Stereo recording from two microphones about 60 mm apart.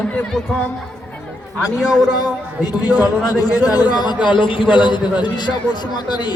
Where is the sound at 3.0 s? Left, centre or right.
Left.